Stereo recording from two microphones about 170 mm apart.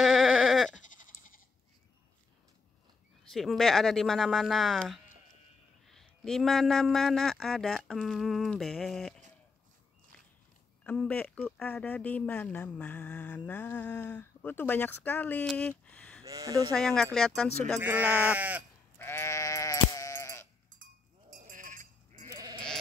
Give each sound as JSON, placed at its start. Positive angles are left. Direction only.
{"t": 0.0, "sound": "bleat", "side_deg": 0}
{"t": 0.7, "sound": "bleat", "side_deg": 50}
{"t": 3.3, "sound": "a man's voice", "side_deg": 0}
{"t": 10.8, "sound": "speech", "side_deg": 5}
{"t": 15.8, "sound": "a sound", "side_deg": 5}
{"t": 16.3, "sound": "speech", "side_deg": -20}
{"t": 16.7, "sound": "a man's voice", "side_deg": 5}
{"t": 17.7, "sound": "speech", "side_deg": -10}
{"t": 18.9, "sound": "sheep", "side_deg": 15}
{"t": 20.8, "sound": "sheep", "side_deg": -55}
{"t": 22.3, "sound": "sheep", "side_deg": -25}